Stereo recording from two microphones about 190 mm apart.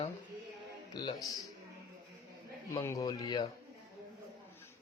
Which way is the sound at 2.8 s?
15° left (ahead or behind).